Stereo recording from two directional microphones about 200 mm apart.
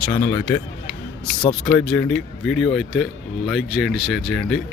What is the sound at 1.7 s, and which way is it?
Speech, 5° left (ahead or behind).